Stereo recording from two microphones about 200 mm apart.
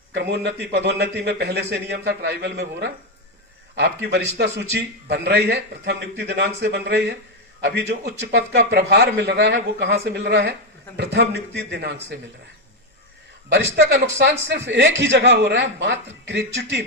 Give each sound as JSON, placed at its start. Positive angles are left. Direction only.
{"t": 0.1, "sound": "a man's voice", "side_deg": -60}
{"t": 13.5, "sound": "a man's voice", "side_deg": -55}